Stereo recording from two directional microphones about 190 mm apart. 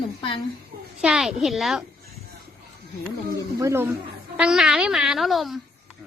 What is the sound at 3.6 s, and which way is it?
A child's voice, 15° right (ahead or behind).